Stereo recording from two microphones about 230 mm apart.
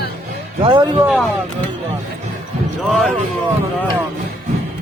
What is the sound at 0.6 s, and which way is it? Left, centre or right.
Speech, right.